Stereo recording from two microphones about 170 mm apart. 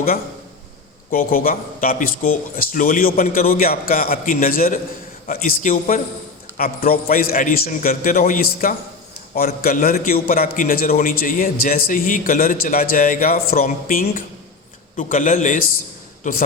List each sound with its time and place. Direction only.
1.1 s a man's voice: 55° left (ahead or behind)